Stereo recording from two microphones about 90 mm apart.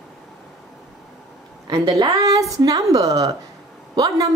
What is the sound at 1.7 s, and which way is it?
A woman's voice, 40° right (ahead or behind).